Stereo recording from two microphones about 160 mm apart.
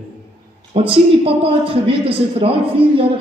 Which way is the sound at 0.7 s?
35° right (ahead or behind).